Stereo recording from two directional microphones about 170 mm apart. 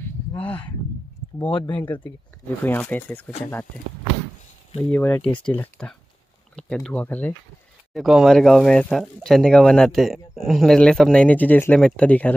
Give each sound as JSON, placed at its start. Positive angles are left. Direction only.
{"t": 0.0, "sound": "a sound", "side_deg": 10}
{"t": 1.5, "sound": "speech", "side_deg": 25}
{"t": 2.0, "sound": "speech", "side_deg": 10}
{"t": 4.9, "sound": "speech", "side_deg": 10}
{"t": 7.9, "sound": "speech", "side_deg": 0}